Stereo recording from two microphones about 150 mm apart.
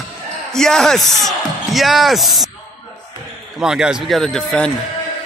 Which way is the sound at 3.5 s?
5° right (ahead or behind).